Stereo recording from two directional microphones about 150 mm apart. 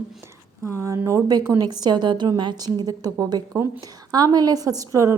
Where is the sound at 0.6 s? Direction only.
20° right (ahead or behind).